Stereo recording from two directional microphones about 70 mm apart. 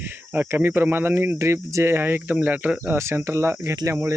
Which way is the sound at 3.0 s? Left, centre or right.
Right.